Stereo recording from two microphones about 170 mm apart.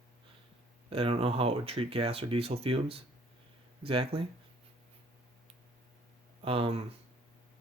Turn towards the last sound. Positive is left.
turn(degrees=-35)  # may be behind; listen again after turning